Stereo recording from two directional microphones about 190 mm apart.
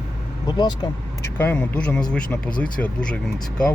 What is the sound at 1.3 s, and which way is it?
Speech, 10° left (ahead or behind).